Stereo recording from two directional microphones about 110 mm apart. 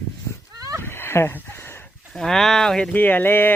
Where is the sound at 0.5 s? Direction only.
30° right (ahead or behind).